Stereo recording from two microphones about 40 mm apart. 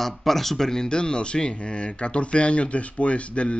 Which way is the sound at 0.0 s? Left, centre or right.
Centre.